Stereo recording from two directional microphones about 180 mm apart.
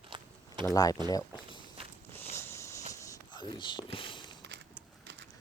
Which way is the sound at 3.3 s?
25° left (ahead or behind).